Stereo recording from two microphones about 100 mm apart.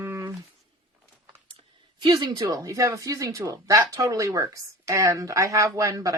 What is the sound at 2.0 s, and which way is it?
Speech, 45° right (ahead or behind).